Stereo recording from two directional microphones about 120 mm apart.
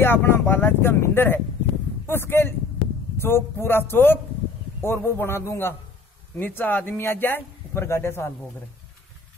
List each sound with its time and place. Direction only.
0.0 s speech: 20° left (ahead or behind)